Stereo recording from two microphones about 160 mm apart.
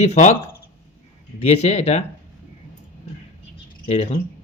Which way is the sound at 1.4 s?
40° left (ahead or behind).